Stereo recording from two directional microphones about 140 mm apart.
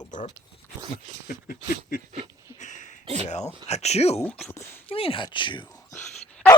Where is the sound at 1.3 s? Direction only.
80° left.